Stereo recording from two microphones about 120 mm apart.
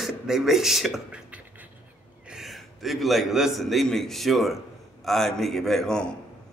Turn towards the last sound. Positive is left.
turn(degrees=5)  # may be behind; listen again after turning